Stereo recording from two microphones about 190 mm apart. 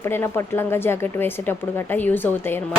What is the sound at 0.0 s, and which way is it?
A woman's voice, 10° left (ahead or behind).